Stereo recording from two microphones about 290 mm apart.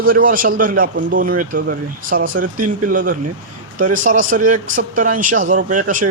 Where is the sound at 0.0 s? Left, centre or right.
Right.